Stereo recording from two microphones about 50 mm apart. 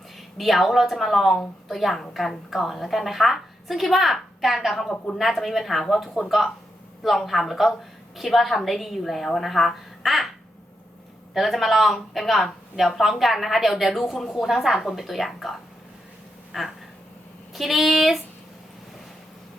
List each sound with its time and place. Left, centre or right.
0.3 s a woman's voice: centre
11.3 s a woman's voice: centre
14.4 s a woman's voice: centre
16.5 s a sound: centre
17.5 s a woman's voice: centre